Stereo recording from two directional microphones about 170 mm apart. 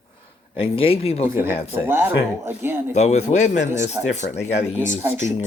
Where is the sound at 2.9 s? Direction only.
40° left (ahead or behind).